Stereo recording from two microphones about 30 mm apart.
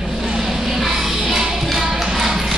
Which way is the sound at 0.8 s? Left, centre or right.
Centre.